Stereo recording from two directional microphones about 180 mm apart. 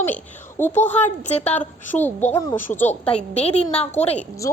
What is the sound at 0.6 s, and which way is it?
Speech, 10° left (ahead or behind).